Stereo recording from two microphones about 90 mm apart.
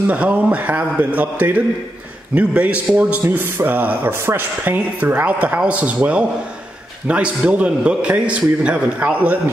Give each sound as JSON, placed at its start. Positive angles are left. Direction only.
{"t": 0.0, "sound": "a man's voice", "side_deg": -15}